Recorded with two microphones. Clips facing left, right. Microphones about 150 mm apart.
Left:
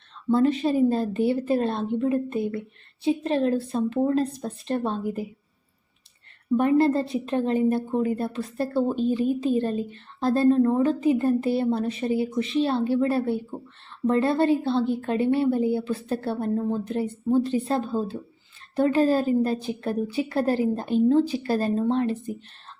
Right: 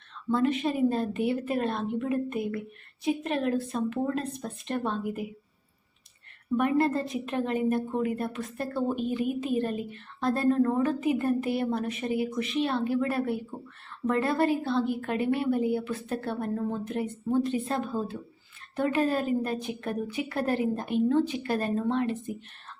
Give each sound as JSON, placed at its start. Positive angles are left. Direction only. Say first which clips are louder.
{"t": 0.3, "sound": "a woman's voice", "louder": "left 5 dB", "side_deg": 35}
{"t": 6.6, "sound": "a woman's voice", "louder": "left 5 dB", "side_deg": 30}